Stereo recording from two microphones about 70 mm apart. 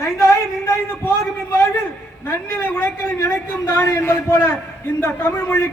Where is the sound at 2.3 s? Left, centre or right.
Left.